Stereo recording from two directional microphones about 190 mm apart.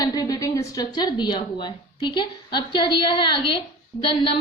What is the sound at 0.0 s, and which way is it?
A woman's voice, 20° left (ahead or behind).